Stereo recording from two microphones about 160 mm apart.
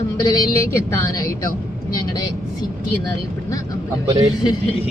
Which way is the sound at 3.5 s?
20° left (ahead or behind).